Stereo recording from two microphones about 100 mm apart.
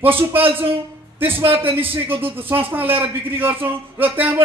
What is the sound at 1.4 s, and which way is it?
Speech, 65° right (ahead or behind).